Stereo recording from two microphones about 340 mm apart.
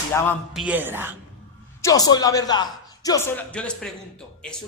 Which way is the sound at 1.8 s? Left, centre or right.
Centre.